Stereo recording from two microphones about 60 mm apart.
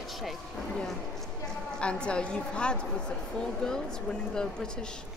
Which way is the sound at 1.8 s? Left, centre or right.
Centre.